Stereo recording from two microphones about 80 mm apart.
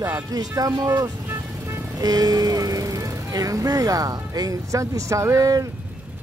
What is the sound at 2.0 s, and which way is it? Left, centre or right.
Speech, right.